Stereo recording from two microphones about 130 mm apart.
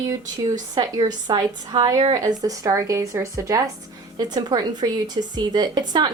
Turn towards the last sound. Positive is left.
turn(degrees=-35)  # may be behind; listen again after turning